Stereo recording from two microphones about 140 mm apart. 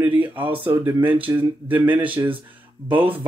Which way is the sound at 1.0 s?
40° right (ahead or behind).